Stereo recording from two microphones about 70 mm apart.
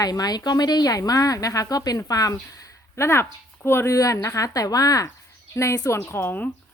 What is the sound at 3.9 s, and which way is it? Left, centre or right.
A woman's voice, left.